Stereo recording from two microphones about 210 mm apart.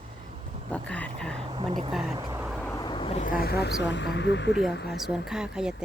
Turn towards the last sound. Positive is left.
turn(degrees=-5)  # may be behind; listen again after turning